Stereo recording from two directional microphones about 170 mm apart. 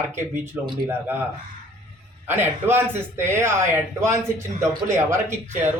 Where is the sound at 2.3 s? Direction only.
10° right (ahead or behind).